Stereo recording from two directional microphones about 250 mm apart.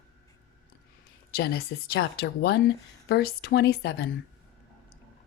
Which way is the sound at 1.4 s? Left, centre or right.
Left.